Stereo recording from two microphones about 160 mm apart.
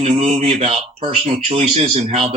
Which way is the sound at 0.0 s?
40° right (ahead or behind).